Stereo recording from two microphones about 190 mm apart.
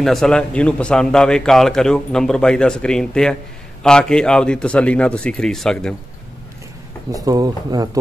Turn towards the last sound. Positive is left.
turn(degrees=-20)  # may be behind; listen again after turning